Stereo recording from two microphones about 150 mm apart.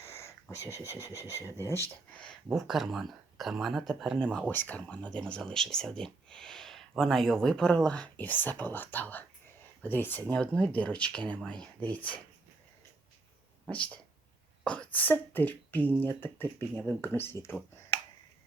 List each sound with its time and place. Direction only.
0.0 s a sound: 20° left (ahead or behind)
0.5 s speech: 20° left (ahead or behind)
2.5 s speech: centre (ahead or behind)
13.7 s speech: 10° left (ahead or behind)